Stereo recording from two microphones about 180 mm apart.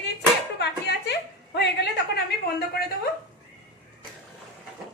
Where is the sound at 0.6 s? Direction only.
65° left (ahead or behind).